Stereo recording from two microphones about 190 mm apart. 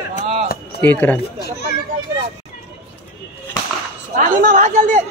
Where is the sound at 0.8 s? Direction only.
10° left (ahead or behind).